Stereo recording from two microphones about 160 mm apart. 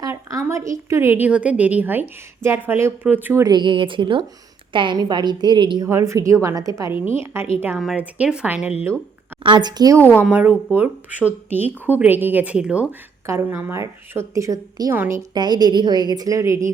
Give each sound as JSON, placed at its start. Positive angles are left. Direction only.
{"t": 0.0, "sound": "a woman's voice", "side_deg": -20}
{"t": 3.4, "sound": "a woman's voice", "side_deg": -30}
{"t": 5.9, "sound": "a woman's voice", "side_deg": -15}
{"t": 9.4, "sound": "a woman's voice", "side_deg": -30}
{"t": 10.2, "sound": "a woman's voice", "side_deg": -10}
{"t": 15.3, "sound": "a woman's voice", "side_deg": -25}